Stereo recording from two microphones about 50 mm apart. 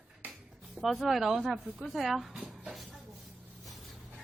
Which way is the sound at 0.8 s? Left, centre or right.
Centre.